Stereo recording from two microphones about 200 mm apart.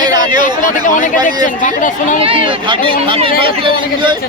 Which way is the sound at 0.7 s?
40° left (ahead or behind).